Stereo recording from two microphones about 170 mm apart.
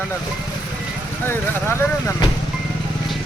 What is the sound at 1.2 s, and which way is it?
Speech, 10° left (ahead or behind).